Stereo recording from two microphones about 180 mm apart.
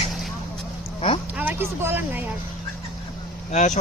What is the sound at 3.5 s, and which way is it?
Speech, 40° left (ahead or behind).